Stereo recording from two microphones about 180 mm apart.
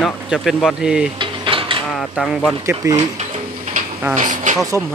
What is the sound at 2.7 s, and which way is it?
Speech, 20° right (ahead or behind).